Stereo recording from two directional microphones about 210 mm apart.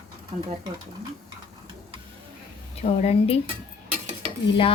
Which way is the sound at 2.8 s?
30° left (ahead or behind).